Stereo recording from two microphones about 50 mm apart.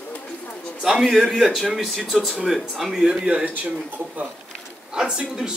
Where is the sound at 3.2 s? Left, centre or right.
Right.